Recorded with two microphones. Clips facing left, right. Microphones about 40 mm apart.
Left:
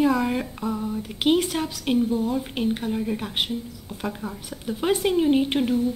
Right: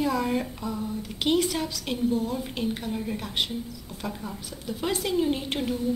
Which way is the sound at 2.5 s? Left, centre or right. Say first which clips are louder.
Left 4 dB; centre.